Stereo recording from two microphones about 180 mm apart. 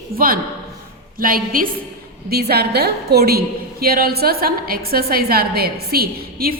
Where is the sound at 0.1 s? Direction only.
55° right (ahead or behind).